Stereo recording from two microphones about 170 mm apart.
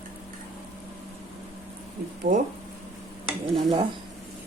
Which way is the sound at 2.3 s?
55° right (ahead or behind).